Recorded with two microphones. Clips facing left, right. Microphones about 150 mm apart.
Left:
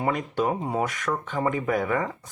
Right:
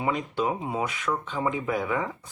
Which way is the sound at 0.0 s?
45° left (ahead or behind).